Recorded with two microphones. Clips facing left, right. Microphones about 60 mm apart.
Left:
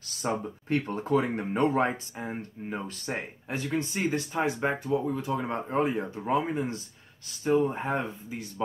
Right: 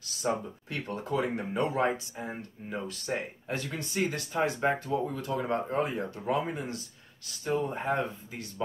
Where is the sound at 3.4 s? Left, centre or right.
Centre.